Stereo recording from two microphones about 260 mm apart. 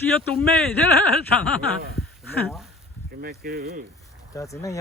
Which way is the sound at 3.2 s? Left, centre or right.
Right.